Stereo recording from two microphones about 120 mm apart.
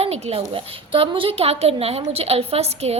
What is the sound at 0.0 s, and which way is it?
A woman's voice, 55° right (ahead or behind).